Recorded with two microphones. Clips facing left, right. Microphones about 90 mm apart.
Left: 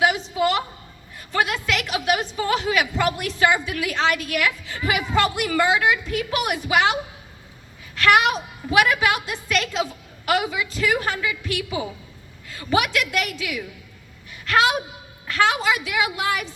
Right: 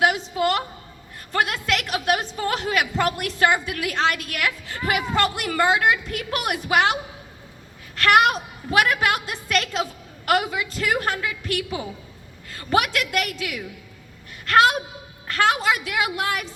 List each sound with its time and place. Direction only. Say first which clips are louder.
0.0 s a sound: even; 50° right (ahead or behind)
2.5 s a woman's voice: left 2 dB; 45° right (ahead or behind)
7.9 s a woman's voice: right 1 dB; 45° right (ahead or behind)